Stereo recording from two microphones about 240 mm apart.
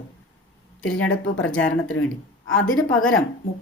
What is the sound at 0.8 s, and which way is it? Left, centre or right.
A woman's voice, left.